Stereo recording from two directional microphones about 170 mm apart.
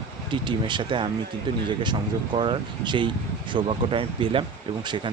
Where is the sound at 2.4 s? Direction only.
25° right (ahead or behind).